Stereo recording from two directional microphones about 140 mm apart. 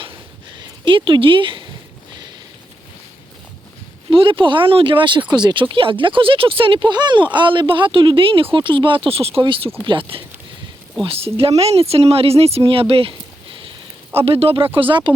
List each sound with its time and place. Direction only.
0.5 s speech: 35° right (ahead or behind)
4.1 s speech: 40° right (ahead or behind)